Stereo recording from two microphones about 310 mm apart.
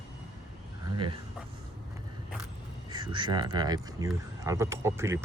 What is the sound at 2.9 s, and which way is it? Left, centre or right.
Speech, centre.